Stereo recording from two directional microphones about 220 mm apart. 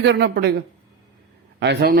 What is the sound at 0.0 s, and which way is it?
Speech, 50° right (ahead or behind).